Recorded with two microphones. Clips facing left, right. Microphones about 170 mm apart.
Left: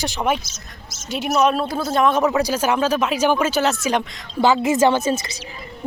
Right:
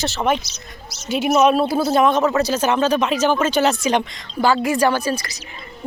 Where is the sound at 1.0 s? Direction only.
Centre (ahead or behind).